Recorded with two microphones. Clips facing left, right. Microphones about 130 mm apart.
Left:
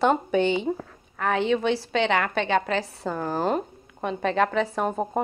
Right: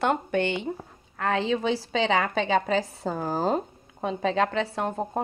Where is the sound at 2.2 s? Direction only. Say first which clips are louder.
Even; 15° right (ahead or behind).